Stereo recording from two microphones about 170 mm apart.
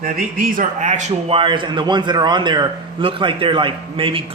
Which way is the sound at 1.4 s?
30° right (ahead or behind).